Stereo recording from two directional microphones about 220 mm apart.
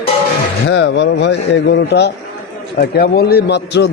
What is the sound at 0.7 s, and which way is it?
A man's voice, 55° left (ahead or behind).